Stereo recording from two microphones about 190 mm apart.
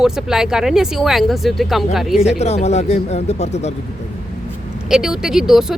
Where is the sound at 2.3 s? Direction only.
35° left (ahead or behind).